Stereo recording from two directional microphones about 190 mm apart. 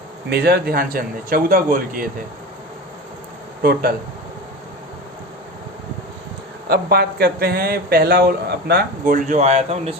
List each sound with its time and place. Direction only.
0.3 s speech: 55° right (ahead or behind)
3.6 s speech: 55° right (ahead or behind)
6.7 s speech: 55° right (ahead or behind); by 9.9 s 35° right (ahead or behind)